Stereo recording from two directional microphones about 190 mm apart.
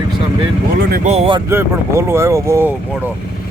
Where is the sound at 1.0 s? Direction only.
30° right (ahead or behind).